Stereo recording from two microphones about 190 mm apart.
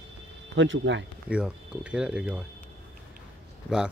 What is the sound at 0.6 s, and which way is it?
Speech, 75° right (ahead or behind).